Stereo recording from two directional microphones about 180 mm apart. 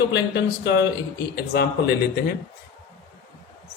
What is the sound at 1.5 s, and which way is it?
Speech, 65° left (ahead or behind).